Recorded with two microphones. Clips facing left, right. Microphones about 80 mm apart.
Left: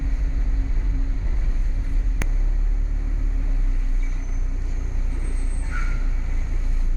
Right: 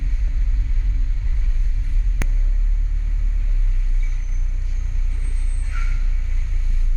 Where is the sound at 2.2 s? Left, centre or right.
Centre.